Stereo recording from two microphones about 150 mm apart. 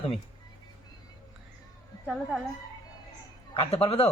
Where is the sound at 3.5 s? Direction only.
40° left (ahead or behind).